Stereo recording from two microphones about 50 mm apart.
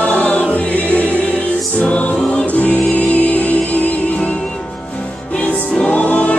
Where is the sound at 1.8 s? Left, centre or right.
Left.